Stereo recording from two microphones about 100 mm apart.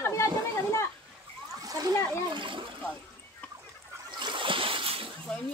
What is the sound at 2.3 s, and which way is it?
Speech, 55° right (ahead or behind).